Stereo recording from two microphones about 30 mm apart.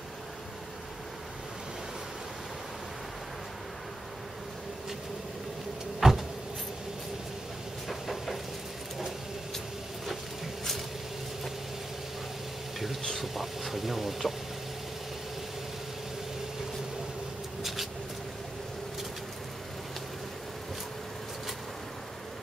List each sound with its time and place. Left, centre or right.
5.9 s vehicle: centre
7.9 s vehicle: centre
12.7 s a sound: centre
13.2 s vehicle: centre